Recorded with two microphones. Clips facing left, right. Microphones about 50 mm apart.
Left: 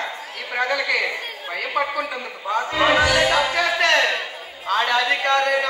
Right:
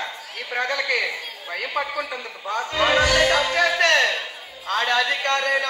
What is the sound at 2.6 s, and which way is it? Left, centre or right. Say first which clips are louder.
Speech: left 2 dB; left.